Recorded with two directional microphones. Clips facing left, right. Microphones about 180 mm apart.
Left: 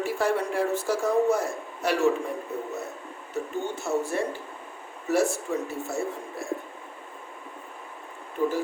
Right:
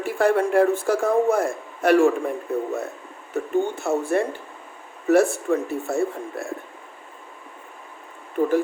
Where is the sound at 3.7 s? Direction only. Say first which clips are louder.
Right 5 dB; 55° right (ahead or behind).